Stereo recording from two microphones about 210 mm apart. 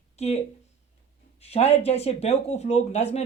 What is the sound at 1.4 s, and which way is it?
Speech, 30° left (ahead or behind).